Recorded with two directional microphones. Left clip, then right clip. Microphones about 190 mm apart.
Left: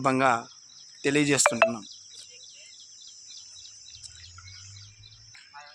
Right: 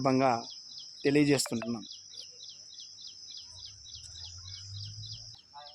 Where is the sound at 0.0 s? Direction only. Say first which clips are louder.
Left 4 dB; 10° left (ahead or behind).